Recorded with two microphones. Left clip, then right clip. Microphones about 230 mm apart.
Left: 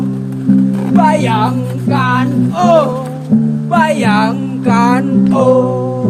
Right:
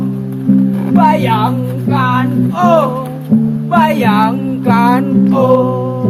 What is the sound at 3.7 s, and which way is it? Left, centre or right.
Music, left.